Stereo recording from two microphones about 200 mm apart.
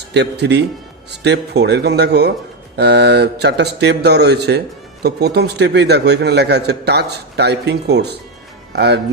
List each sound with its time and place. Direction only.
0.1 s a man's voice: 55° right (ahead or behind)